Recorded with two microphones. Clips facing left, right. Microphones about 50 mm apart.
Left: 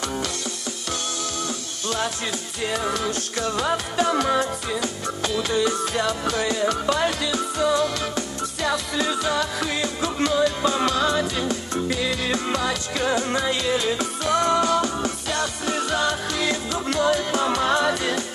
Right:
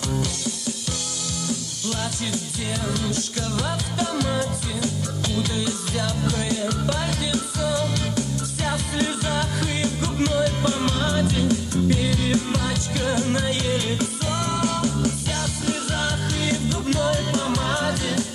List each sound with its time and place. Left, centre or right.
2.7 s music: left
12.0 s music: left